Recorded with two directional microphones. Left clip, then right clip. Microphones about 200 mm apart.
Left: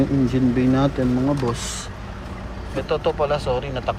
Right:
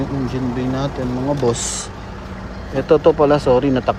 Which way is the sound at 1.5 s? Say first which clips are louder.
Right 6 dB; 20° right (ahead or behind).